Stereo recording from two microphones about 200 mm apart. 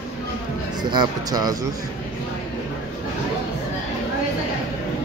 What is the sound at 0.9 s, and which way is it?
Speech, 20° right (ahead or behind).